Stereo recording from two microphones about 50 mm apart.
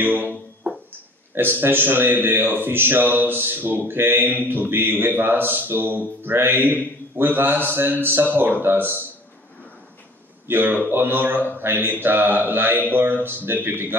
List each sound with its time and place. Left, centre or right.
0.0 s speech: right
0.7 s a sound: right
1.3 s speech: right
10.5 s speech: right